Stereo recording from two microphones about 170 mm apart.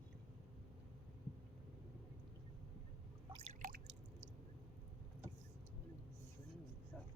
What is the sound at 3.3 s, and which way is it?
Drip, 30° right (ahead or behind).